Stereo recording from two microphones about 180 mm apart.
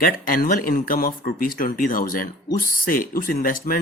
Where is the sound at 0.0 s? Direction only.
50° left (ahead or behind).